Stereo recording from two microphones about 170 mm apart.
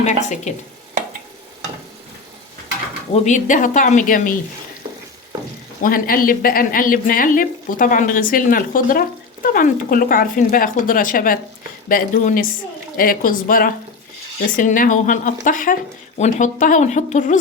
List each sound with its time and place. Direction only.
0.0 s speech: 45° left (ahead or behind)
3.2 s speech: 45° left (ahead or behind)
5.8 s speech: 55° left (ahead or behind)